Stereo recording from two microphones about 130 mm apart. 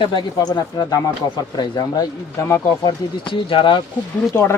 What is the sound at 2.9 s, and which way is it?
Speech, 40° left (ahead or behind).